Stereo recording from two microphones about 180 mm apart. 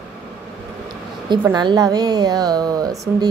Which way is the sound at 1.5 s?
25° right (ahead or behind).